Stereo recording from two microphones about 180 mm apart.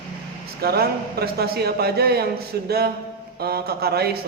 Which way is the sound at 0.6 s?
60° right (ahead or behind).